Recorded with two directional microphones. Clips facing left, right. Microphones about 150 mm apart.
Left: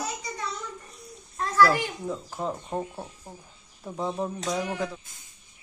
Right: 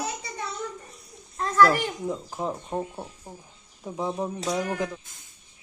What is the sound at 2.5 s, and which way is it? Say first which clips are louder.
A man's voice: right 1 dB; centre (ahead or behind).